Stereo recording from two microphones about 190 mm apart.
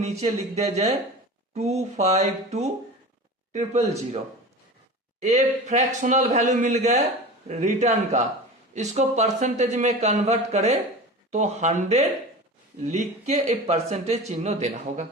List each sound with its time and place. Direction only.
0.0 s speech: 35° right (ahead or behind)
5.2 s speech: 35° right (ahead or behind)